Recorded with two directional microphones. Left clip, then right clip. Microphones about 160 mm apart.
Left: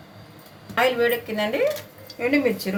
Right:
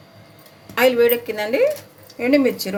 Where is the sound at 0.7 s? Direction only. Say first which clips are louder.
Right 5 dB; 65° right (ahead or behind).